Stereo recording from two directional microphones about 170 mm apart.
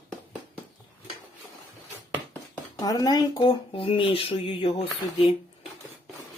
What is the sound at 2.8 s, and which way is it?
Speech, 25° left (ahead or behind).